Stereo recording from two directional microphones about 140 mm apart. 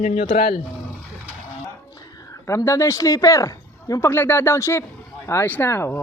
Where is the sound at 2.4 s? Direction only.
20° left (ahead or behind).